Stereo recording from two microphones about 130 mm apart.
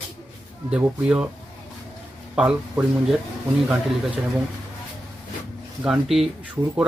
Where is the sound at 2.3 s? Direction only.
5° right (ahead or behind).